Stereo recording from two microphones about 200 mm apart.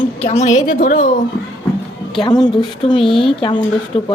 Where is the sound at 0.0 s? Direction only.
35° left (ahead or behind).